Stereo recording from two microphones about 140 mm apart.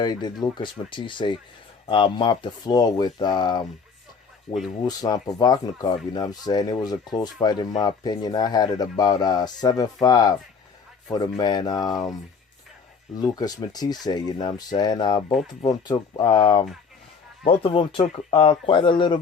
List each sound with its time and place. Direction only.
0.0 s speech: 30° left (ahead or behind)
4.8 s speech: 25° left (ahead or behind)